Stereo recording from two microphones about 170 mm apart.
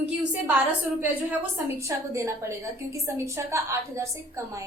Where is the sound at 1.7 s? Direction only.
15° right (ahead or behind).